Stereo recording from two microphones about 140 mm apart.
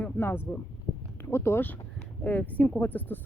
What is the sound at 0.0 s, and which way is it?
Speech, 15° left (ahead or behind).